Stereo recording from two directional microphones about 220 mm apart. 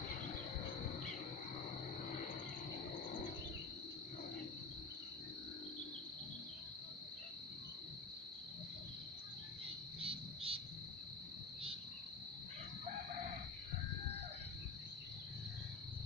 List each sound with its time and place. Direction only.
10.0 s cricket: 25° right (ahead or behind)